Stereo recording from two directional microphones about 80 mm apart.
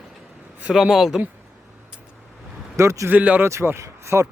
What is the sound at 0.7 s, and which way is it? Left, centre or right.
Speech, centre.